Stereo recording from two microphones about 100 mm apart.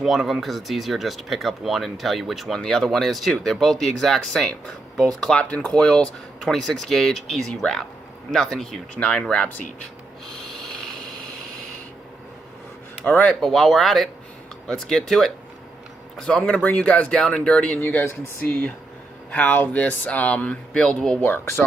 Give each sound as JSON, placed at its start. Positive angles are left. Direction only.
{"t": 0.0, "sound": "speech", "side_deg": 0}
{"t": 13.1, "sound": "speech", "side_deg": 15}
{"t": 13.4, "sound": "speech", "side_deg": 0}
{"t": 17.7, "sound": "speech", "side_deg": 20}
{"t": 19.3, "sound": "speech", "side_deg": 15}